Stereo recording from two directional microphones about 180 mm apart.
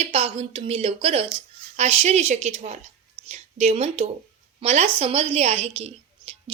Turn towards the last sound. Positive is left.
turn(degrees=-35)  # may be behind; listen again after turning